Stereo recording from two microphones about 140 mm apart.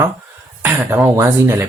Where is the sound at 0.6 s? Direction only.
15° right (ahead or behind).